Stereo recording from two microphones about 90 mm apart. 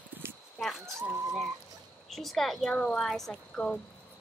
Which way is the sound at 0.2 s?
30° right (ahead or behind).